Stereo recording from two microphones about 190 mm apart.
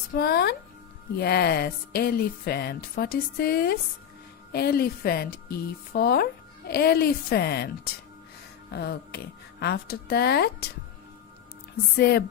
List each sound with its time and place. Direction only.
0.1 s speech: 55° left (ahead or behind)
8.7 s speech: 60° left (ahead or behind)
11.9 s speech: 55° left (ahead or behind)